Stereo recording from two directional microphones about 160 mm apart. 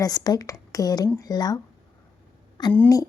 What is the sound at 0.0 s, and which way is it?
A woman's voice, 25° left (ahead or behind).